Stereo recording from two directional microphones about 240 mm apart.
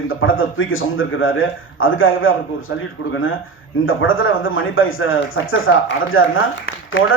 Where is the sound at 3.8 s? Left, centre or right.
Left.